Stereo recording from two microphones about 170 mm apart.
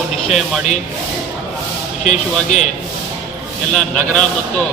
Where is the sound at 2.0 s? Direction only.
45° left (ahead or behind).